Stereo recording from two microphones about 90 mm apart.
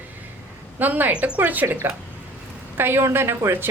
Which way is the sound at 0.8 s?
20° right (ahead or behind).